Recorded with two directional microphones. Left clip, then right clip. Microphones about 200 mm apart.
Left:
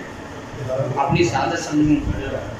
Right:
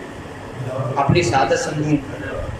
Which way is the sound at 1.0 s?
55° right (ahead or behind).